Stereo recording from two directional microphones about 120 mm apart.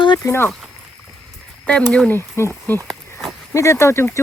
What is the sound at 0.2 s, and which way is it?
Speech, 20° left (ahead or behind).